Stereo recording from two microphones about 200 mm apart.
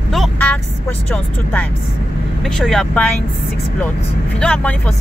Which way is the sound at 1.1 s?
5° left (ahead or behind).